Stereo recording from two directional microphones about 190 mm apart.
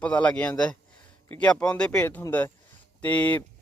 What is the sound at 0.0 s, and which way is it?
A man's voice, 5° left (ahead or behind).